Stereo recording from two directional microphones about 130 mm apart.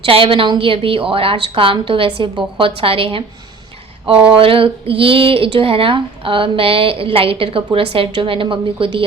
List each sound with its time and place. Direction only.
0.0 s speech: 45° right (ahead or behind)